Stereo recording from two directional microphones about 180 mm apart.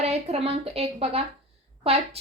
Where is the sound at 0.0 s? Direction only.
35° right (ahead or behind).